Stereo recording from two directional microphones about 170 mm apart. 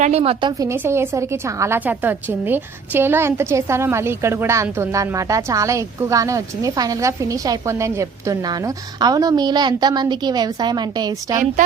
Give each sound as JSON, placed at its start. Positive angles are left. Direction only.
{"t": 0.0, "sound": "a woman's voice", "side_deg": -40}
{"t": 0.6, "sound": "a woman's voice", "side_deg": -15}